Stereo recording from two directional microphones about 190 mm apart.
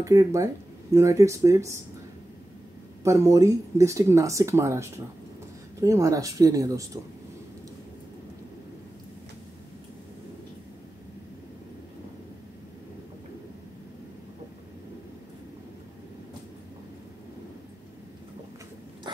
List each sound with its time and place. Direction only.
0.0 s speech: 15° right (ahead or behind)
3.0 s speech: 15° right (ahead or behind)